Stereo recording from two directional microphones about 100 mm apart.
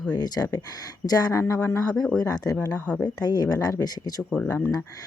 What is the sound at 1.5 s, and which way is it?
Speech, 20° left (ahead or behind).